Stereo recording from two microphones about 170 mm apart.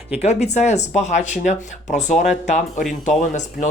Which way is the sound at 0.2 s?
40° left (ahead or behind).